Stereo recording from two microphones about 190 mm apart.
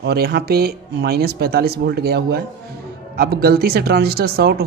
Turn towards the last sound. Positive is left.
turn(degrees=-55)  # may be behind; listen again after turning